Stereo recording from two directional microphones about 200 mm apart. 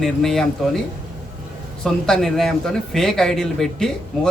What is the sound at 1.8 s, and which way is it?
Speech, centre (ahead or behind).